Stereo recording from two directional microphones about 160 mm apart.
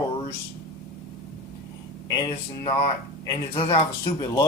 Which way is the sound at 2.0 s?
25° left (ahead or behind).